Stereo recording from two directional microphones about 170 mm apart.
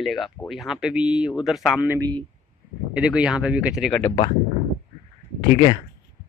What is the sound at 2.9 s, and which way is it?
Speech, 5° right (ahead or behind).